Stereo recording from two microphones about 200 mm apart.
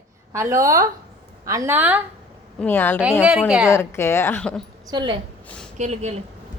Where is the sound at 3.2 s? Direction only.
5° right (ahead or behind).